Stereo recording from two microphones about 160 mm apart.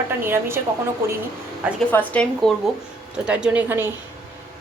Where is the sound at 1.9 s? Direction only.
10° left (ahead or behind).